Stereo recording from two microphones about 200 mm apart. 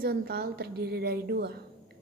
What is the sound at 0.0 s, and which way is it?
A woman's voice, 50° right (ahead or behind).